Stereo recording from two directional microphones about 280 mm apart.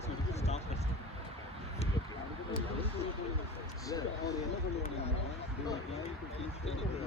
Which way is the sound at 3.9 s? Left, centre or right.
Centre.